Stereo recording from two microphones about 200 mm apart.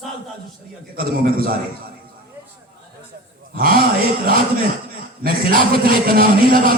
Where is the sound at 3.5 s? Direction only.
50° right (ahead or behind).